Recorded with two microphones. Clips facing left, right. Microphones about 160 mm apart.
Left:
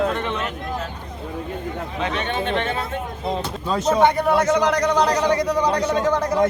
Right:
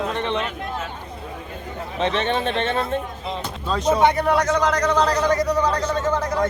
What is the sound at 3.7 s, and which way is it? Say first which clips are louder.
Speech: left 1 dB; centre (ahead or behind).